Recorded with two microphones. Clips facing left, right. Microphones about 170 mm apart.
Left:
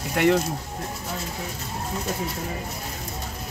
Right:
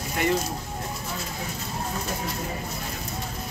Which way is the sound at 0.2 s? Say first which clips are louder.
Left 6 dB; 70° left (ahead or behind).